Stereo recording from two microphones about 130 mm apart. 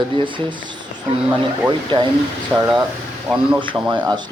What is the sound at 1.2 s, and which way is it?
Speech, 10° right (ahead or behind).